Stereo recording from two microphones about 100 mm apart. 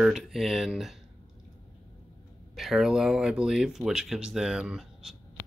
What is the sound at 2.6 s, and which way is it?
Speech, 5° right (ahead or behind).